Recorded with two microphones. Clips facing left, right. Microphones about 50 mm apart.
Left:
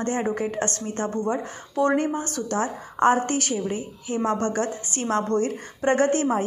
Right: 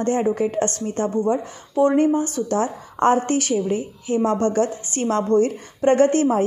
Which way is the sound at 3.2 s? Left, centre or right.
Right.